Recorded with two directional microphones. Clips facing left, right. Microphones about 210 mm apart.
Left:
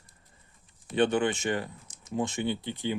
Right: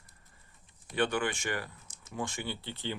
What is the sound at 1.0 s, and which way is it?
Speech, 20° left (ahead or behind).